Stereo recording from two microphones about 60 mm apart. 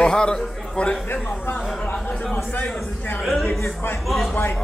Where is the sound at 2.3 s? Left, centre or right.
Left.